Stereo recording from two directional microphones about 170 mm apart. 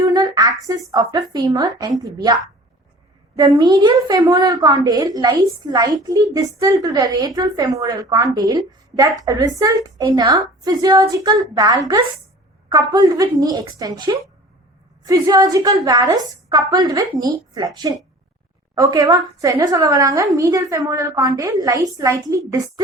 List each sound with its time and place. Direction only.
0.1 s a woman's voice: 20° right (ahead or behind)
18.7 s a woman's voice: 20° right (ahead or behind)